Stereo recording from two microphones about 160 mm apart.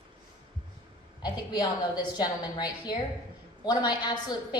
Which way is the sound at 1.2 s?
25° left (ahead or behind).